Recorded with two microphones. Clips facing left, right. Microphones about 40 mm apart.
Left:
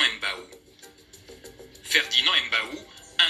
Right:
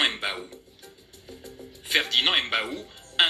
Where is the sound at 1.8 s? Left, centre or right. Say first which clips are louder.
Left 1 dB; centre.